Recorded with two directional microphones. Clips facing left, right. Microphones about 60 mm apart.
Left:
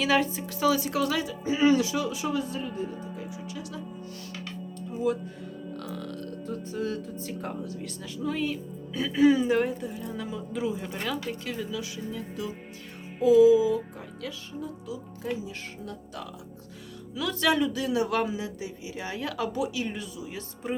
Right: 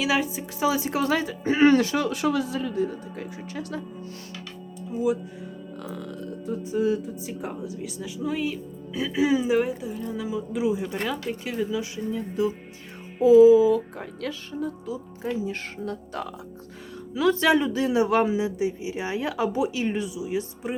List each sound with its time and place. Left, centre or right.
0.0 s speech: centre
0.5 s speech: right
1.5 s speech: right
3.5 s speech: right
4.9 s speech: centre
13.1 s music: right
13.6 s speech: right
14.8 s speech: right
15.4 s speech: right
17.2 s speech: right
20.1 s speech: centre